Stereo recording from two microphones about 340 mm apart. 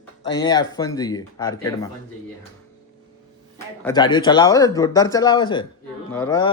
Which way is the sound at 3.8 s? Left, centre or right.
Centre.